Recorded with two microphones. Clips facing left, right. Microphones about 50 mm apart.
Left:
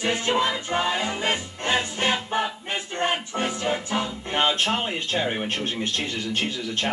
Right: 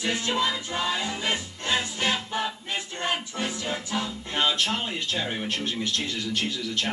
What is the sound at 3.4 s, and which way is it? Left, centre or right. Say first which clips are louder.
Speech: left 6 dB; left.